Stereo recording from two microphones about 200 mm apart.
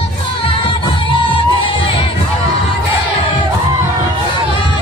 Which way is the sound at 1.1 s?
25° left (ahead or behind).